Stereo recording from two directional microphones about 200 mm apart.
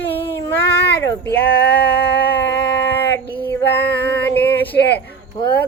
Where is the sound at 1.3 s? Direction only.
55° left (ahead or behind).